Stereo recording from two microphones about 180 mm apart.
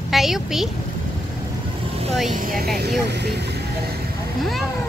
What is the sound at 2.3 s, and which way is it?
Speech, 50° right (ahead or behind).